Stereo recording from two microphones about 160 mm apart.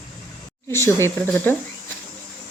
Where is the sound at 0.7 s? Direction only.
15° left (ahead or behind).